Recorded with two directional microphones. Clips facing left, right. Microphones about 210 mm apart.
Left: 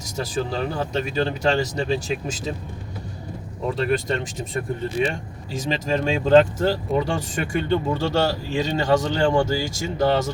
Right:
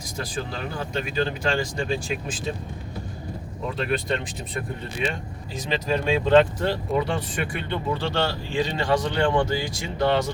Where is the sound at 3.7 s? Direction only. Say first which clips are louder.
Left 3 dB; 40° left (ahead or behind).